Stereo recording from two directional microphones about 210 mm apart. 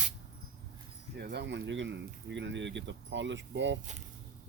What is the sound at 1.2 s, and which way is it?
Speech, 50° right (ahead or behind).